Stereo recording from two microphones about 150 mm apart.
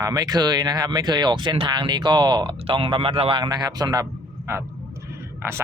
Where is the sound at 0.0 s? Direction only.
25° right (ahead or behind).